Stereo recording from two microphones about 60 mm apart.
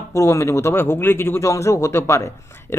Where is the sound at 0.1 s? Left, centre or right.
Left.